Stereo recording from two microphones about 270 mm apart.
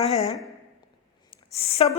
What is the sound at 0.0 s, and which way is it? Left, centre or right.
Speech, left.